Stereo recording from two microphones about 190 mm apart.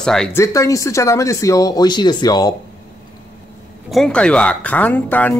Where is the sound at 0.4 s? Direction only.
15° left (ahead or behind).